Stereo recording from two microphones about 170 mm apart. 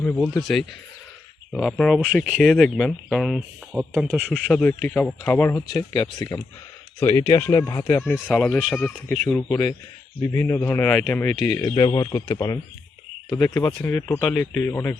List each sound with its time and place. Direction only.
0.0 s speech: 5° left (ahead or behind)
11.6 s speech: 25° left (ahead or behind)